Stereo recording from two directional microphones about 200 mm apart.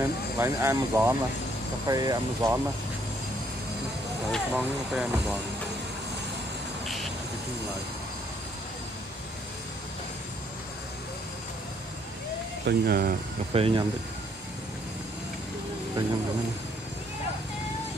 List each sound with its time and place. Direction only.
0.0 s speech: 15° right (ahead or behind)
4.3 s speech: 5° right (ahead or behind)
12.6 s speech: 50° right (ahead or behind)
13.5 s speech: 30° right (ahead or behind)